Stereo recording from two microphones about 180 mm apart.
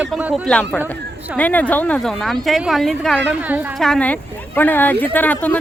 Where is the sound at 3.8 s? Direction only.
5° left (ahead or behind).